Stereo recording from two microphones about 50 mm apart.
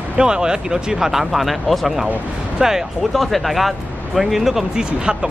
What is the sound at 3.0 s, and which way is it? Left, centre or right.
Speech, centre.